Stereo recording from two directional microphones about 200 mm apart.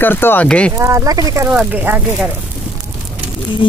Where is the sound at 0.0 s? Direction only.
10° left (ahead or behind).